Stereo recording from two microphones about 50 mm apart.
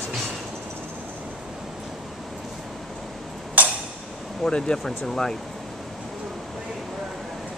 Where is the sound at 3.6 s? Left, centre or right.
Right.